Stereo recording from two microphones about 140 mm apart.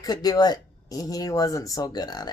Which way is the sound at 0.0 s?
25° left (ahead or behind).